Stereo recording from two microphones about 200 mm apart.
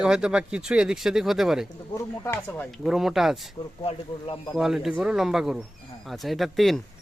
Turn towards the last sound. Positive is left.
turn(degrees=0)  # may be behind; listen again after turning